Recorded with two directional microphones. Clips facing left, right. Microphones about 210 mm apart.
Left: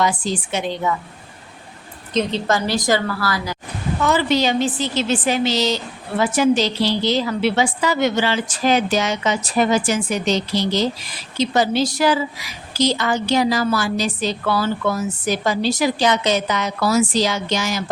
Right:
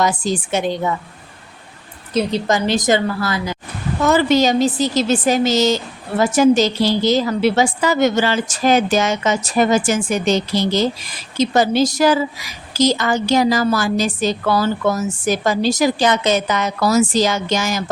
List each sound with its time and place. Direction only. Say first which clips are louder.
0.0 s a woman's voice: right 2 dB; 45° right (ahead or behind)
2.1 s a woman's voice: right 2 dB; 15° right (ahead or behind)
4.0 s a woman's voice: right 4 dB; 45° right (ahead or behind)